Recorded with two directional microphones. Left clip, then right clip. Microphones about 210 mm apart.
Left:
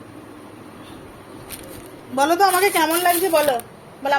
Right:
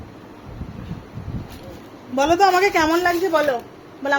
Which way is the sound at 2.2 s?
25° right (ahead or behind).